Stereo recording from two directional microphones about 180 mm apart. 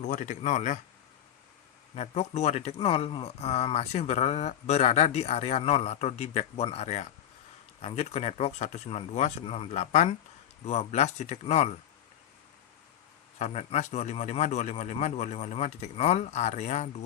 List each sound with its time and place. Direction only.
0.0 s speech: 40° left (ahead or behind)
2.0 s speech: 35° left (ahead or behind)
13.4 s speech: 35° left (ahead or behind)